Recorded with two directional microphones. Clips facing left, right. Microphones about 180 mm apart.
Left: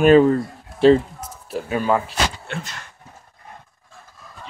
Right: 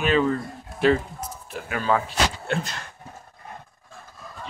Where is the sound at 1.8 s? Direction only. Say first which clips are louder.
Left 1 dB; 10° left (ahead or behind).